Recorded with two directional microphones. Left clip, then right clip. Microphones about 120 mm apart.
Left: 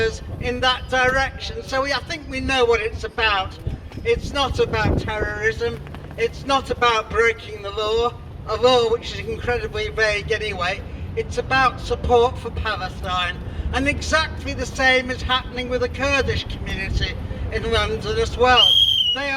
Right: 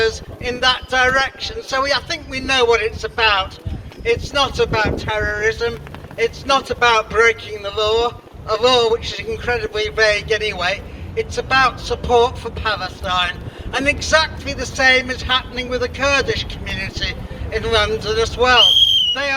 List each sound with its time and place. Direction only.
0.0 s a man's voice: 30° right (ahead or behind)